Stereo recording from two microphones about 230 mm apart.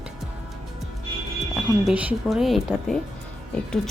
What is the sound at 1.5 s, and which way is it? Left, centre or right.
Speech, centre.